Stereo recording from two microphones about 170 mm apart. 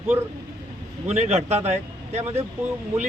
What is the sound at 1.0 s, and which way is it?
Speech, 40° right (ahead or behind).